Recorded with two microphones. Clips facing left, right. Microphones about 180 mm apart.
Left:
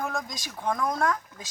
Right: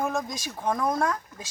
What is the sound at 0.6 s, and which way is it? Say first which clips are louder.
Speech: right 1 dB; 20° right (ahead or behind).